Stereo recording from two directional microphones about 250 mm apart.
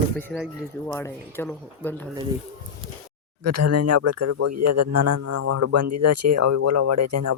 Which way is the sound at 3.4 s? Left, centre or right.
Right.